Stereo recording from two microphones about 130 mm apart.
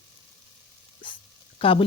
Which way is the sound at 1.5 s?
45° left (ahead or behind).